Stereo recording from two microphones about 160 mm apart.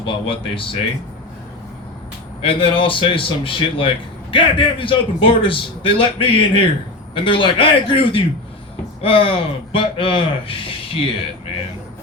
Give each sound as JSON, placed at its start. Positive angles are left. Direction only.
{"t": 0.0, "sound": "a man's voice", "side_deg": 35}
{"t": 2.4, "sound": "a man's voice", "side_deg": 35}